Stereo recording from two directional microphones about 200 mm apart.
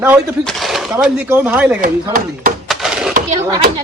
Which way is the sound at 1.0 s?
5° right (ahead or behind).